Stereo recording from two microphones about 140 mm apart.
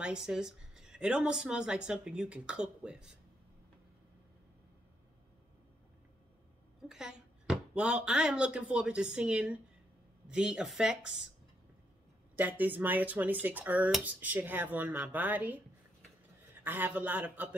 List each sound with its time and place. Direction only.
0.0 s speech: 5° right (ahead or behind)
6.9 s speech: 5° right (ahead or behind)
12.4 s speech: 10° right (ahead or behind)